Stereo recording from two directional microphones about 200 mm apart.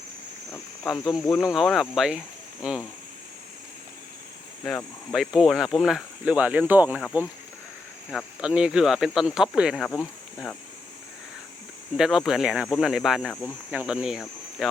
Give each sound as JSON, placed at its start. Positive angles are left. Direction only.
{"t": 0.9, "sound": "speech", "side_deg": 0}
{"t": 4.6, "sound": "speech", "side_deg": 5}
{"t": 8.1, "sound": "speech", "side_deg": -5}
{"t": 10.0, "sound": "cricket", "side_deg": 10}
{"t": 11.9, "sound": "speech", "side_deg": 0}